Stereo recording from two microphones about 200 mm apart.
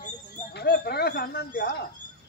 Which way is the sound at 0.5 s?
55° left (ahead or behind).